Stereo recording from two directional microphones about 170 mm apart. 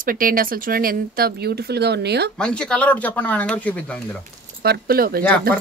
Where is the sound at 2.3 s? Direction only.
5° left (ahead or behind).